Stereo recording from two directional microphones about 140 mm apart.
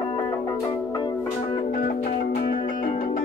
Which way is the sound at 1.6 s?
70° left (ahead or behind).